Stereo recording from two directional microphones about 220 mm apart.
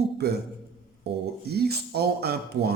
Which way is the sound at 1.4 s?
45° right (ahead or behind).